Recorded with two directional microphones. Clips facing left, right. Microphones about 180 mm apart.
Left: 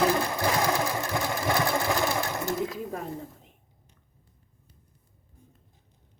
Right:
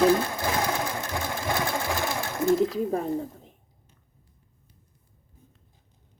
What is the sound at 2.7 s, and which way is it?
Speech, 35° right (ahead or behind).